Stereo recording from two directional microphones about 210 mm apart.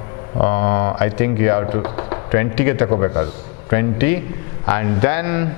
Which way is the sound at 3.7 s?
10° left (ahead or behind).